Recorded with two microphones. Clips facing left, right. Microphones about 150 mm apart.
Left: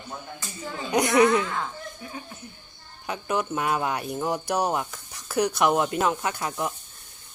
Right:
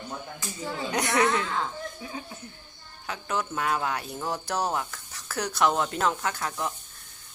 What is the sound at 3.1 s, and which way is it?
Speech, 15° left (ahead or behind).